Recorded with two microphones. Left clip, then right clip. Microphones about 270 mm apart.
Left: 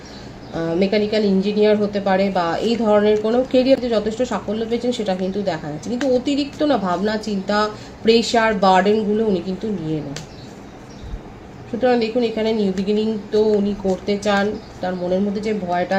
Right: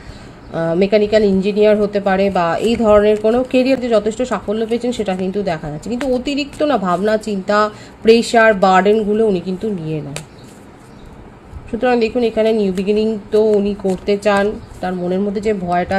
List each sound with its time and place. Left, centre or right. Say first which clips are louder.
0.5 s speech: right 5 dB; right
11.8 s speech: right 3 dB; right